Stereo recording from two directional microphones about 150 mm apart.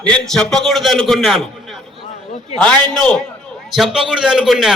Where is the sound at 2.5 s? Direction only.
5° left (ahead or behind).